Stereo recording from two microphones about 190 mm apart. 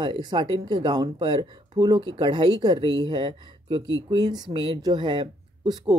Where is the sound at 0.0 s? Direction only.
25° right (ahead or behind).